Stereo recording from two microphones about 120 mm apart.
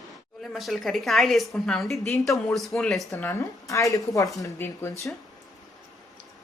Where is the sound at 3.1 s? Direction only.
20° left (ahead or behind).